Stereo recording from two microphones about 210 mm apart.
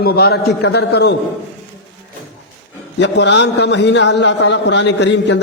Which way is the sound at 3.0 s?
55° left (ahead or behind).